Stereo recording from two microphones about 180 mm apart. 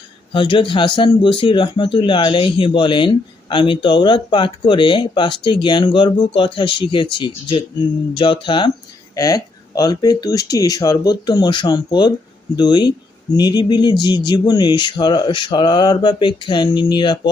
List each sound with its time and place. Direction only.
0.3 s speech: 30° left (ahead or behind)